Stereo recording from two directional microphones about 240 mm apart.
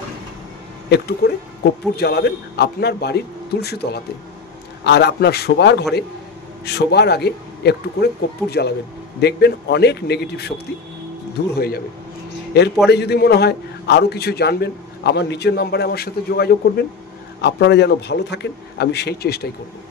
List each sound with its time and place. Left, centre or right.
0.8 s a man's voice: left
11.5 s a man's voice: left
12.9 s a man's voice: left